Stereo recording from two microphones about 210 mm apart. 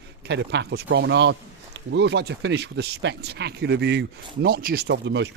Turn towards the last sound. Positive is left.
turn(degrees=-55)  # may be behind; listen again after turning